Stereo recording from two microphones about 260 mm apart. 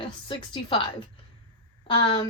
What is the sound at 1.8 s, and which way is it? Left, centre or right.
Speech, centre.